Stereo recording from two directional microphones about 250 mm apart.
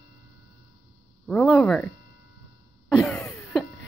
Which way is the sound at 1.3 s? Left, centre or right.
Centre.